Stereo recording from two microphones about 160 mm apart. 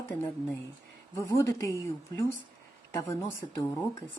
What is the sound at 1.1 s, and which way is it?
Speech, 20° left (ahead or behind).